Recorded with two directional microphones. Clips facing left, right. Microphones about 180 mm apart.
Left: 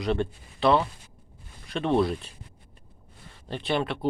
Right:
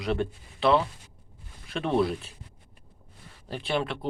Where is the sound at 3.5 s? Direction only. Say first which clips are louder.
Left 2 dB; centre (ahead or behind).